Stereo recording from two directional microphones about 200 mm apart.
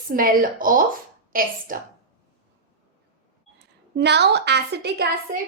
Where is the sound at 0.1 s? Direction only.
45° right (ahead or behind).